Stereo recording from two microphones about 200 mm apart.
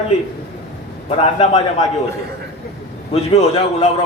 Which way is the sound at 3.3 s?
35° left (ahead or behind).